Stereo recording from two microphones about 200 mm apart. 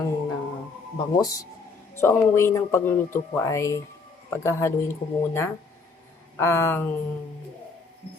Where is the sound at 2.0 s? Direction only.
15° left (ahead or behind).